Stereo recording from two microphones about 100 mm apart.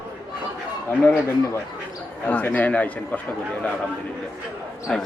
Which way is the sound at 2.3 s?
20° left (ahead or behind).